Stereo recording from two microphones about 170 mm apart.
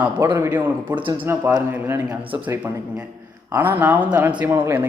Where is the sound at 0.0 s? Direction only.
15° right (ahead or behind).